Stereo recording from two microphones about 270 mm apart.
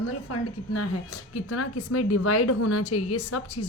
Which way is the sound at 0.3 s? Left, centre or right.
Left.